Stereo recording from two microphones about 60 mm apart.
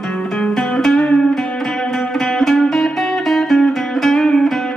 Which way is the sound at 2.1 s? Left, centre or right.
Centre.